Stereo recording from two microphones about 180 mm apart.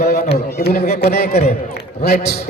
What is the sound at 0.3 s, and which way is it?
A man's voice, 60° left (ahead or behind).